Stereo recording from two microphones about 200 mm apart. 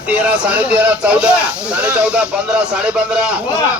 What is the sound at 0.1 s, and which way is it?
Speech, 5° right (ahead or behind).